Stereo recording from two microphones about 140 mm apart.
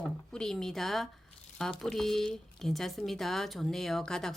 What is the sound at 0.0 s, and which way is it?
A woman's voice, 5° left (ahead or behind).